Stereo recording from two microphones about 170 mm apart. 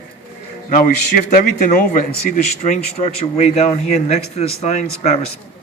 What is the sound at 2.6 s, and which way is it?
Speech, 40° left (ahead or behind).